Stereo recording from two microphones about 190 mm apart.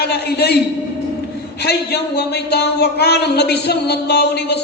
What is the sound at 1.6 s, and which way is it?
Speech, 60° left (ahead or behind).